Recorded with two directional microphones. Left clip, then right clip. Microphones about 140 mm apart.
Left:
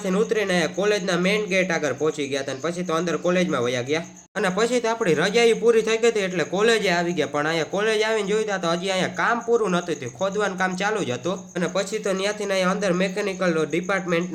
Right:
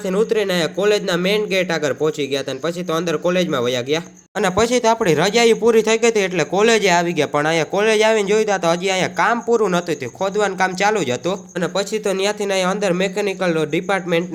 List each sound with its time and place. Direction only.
0.1 s a man's voice: 25° right (ahead or behind)